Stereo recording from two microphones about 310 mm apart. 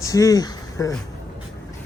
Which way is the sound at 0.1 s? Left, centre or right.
Centre.